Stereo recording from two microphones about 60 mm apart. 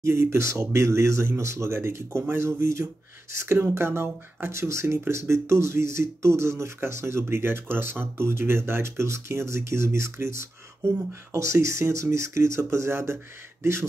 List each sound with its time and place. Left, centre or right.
0.0 s speech: right